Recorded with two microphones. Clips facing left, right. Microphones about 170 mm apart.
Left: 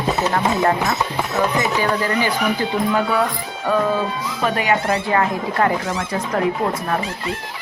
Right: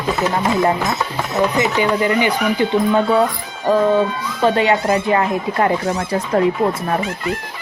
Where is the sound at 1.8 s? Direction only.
20° right (ahead or behind).